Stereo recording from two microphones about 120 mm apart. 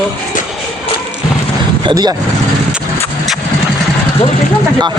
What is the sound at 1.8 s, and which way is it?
Speech, 35° right (ahead or behind).